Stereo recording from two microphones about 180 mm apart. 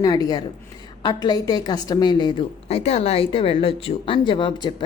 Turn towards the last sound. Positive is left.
turn(degrees=25)  # may be behind; listen again after turning